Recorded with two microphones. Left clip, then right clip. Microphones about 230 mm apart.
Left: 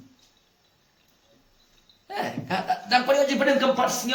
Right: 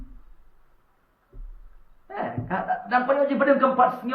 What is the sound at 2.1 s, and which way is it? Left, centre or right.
Chuckle, left.